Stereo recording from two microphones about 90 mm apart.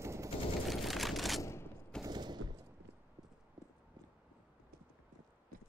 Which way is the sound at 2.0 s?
50° right (ahead or behind).